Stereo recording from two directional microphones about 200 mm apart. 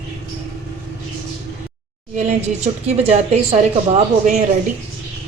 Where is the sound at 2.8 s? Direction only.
35° right (ahead or behind).